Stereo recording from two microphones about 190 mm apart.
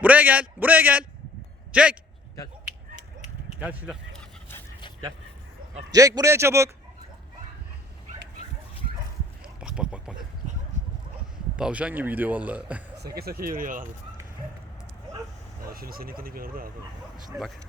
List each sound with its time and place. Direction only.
0.0 s a man's voice: 10° right (ahead or behind)
3.6 s a man's voice: 10° right (ahead or behind)
4.1 s a sound: 10° left (ahead or behind)
5.9 s a man's voice: 20° right (ahead or behind)
9.6 s a sound: 5° right (ahead or behind)
11.5 s a man's voice: 5° right (ahead or behind)
13.1 s speech: 55° right (ahead or behind)
15.6 s speech: 50° right (ahead or behind)
17.2 s speech: centre (ahead or behind)